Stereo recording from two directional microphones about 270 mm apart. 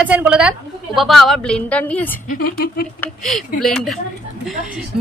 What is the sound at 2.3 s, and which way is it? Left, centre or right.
Speech, left.